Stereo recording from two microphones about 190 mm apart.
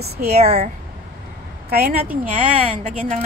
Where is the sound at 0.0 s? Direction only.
55° right (ahead or behind).